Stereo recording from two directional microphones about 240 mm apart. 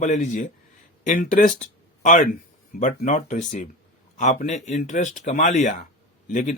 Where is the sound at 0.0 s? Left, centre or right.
Left.